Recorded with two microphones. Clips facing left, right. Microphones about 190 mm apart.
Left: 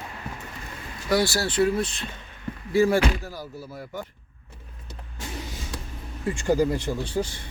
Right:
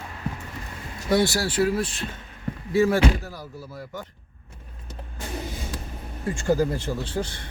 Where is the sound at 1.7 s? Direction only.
5° right (ahead or behind).